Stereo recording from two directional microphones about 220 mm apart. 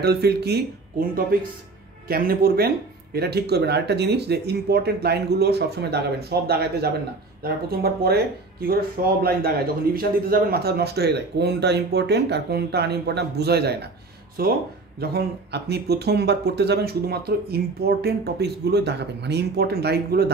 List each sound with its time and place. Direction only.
0.0 s speech: 45° right (ahead or behind)
15.0 s speech: 45° right (ahead or behind)